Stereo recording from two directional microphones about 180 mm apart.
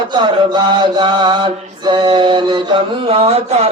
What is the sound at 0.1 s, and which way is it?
Mantra, 25° right (ahead or behind).